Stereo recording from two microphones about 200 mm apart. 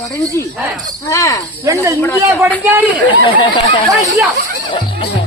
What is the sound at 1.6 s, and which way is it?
Speech, 15° right (ahead or behind).